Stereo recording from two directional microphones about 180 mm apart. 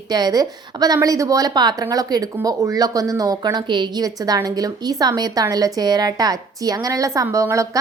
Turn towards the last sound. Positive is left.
turn(degrees=-15)  # may be behind; listen again after turning